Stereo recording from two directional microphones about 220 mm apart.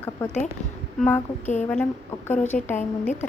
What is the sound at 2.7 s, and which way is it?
Speech, 30° left (ahead or behind).